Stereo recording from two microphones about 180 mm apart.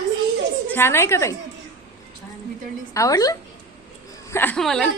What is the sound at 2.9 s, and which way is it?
A child's voice, 20° left (ahead or behind).